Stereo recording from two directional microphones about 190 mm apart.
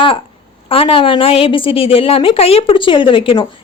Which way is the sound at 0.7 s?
30° left (ahead or behind).